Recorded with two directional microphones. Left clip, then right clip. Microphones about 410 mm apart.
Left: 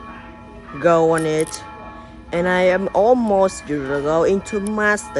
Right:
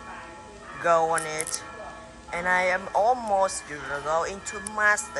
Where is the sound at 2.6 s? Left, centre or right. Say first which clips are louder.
Left 7 dB; right.